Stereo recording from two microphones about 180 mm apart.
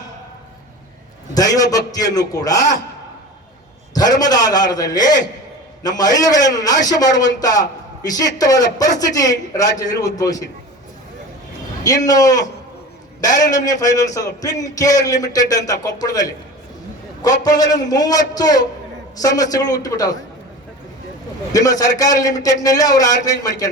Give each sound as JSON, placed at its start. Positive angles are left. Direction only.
{"t": 1.3, "sound": "speech", "side_deg": 20}
{"t": 3.9, "sound": "a man's voice", "side_deg": 20}
{"t": 11.8, "sound": "speech", "side_deg": 20}
{"t": 13.5, "sound": "speech", "side_deg": 20}
{"t": 17.4, "sound": "speech", "side_deg": 20}
{"t": 21.5, "sound": "speech", "side_deg": 20}